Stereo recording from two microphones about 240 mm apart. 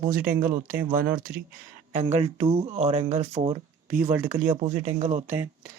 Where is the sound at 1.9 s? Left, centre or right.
Right.